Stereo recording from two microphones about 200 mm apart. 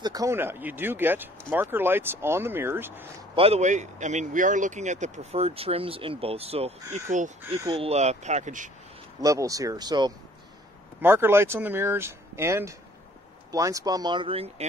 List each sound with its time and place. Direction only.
0.0 s speech: 20° right (ahead or behind)
3.3 s speech: 30° right (ahead or behind)
7.6 s speech: 20° right (ahead or behind)
7.9 s speech: 35° right (ahead or behind)
9.2 s speech: 15° right (ahead or behind)